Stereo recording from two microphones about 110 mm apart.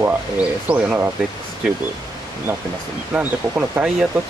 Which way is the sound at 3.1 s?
15° right (ahead or behind).